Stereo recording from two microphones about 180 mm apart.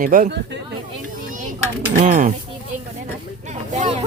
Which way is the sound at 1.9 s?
45° right (ahead or behind).